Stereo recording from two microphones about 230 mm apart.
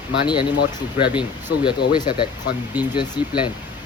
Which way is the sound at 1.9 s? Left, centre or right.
Centre.